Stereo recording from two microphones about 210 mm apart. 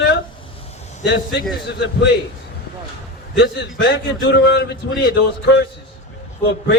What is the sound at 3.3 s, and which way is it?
A man's voice, 55° left (ahead or behind).